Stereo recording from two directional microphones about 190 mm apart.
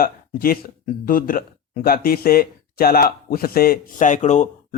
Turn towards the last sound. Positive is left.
turn(degrees=40)  # may be behind; listen again after turning